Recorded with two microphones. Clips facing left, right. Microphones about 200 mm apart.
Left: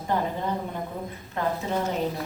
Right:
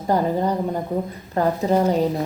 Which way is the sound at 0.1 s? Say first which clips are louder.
Right 7 dB; 40° right (ahead or behind).